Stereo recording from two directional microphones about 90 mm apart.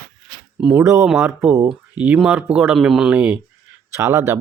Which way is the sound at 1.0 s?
5° right (ahead or behind).